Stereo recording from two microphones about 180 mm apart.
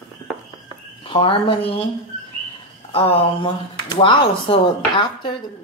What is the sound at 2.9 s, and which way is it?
Speech, 30° left (ahead or behind).